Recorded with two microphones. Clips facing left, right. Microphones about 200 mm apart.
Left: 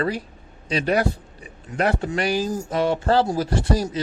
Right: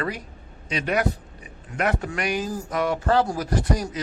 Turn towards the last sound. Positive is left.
turn(degrees=30)  # may be behind; listen again after turning